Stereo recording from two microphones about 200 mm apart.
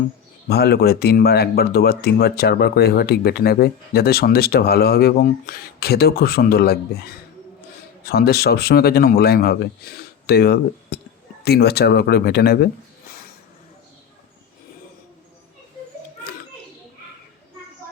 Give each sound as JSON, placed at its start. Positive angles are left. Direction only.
{"t": 0.4, "sound": "speech", "side_deg": 55}